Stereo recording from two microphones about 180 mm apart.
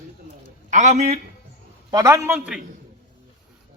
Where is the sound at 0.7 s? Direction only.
40° right (ahead or behind).